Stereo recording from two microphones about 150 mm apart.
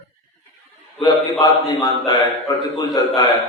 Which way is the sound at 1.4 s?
25° left (ahead or behind).